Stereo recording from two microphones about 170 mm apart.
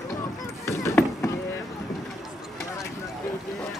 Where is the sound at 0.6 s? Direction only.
15° left (ahead or behind).